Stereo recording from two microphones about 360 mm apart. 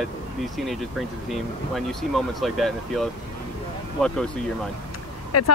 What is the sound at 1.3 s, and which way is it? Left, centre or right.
Speech, centre.